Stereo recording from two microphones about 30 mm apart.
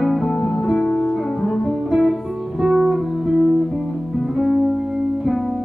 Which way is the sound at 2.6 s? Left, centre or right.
Centre.